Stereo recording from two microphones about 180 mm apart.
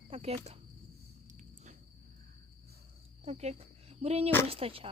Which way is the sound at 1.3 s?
45° right (ahead or behind).